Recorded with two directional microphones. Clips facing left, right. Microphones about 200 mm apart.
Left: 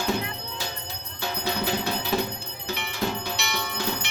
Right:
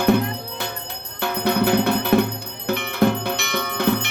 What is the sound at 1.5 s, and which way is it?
Music, 60° right (ahead or behind).